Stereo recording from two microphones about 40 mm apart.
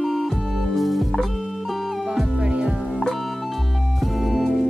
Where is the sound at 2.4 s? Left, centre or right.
Right.